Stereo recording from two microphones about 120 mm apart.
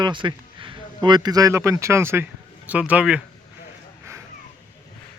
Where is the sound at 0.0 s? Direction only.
40° right (ahead or behind); by 3.2 s 10° right (ahead or behind).